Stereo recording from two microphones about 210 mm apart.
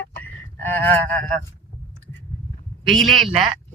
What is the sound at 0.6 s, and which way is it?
Speech, 10° left (ahead or behind).